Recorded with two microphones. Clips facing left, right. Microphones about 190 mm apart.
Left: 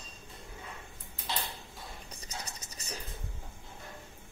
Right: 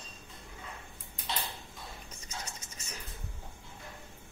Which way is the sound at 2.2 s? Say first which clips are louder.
Even; 35° left (ahead or behind).